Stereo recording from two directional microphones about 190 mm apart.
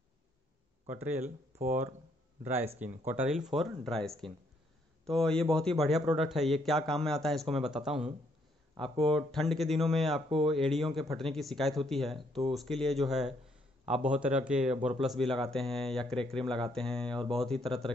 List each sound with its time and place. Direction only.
0.8 s speech: 10° right (ahead or behind)
1.2 s speech: 40° right (ahead or behind)
2.4 s a man's voice: 10° right (ahead or behind)
8.7 s speech: 30° right (ahead or behind)
9.1 s a man's voice: centre (ahead or behind)